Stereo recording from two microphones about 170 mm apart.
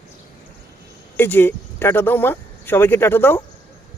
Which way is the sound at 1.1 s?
10° left (ahead or behind).